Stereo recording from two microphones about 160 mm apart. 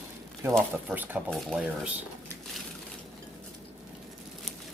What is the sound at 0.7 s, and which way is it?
Speech, 10° right (ahead or behind).